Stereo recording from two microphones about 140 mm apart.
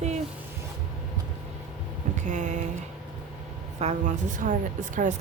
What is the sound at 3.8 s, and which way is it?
Speech, 55° right (ahead or behind).